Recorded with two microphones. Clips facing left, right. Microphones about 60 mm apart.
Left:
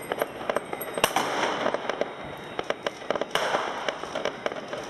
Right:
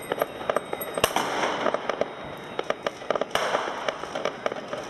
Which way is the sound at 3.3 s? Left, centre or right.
Centre.